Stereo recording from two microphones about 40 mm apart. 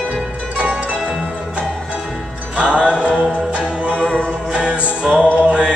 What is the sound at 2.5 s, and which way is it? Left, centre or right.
Music, right.